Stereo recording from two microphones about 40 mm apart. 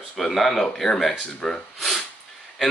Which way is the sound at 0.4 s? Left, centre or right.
Centre.